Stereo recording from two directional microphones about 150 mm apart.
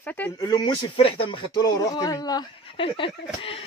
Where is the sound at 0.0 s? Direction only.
10° left (ahead or behind).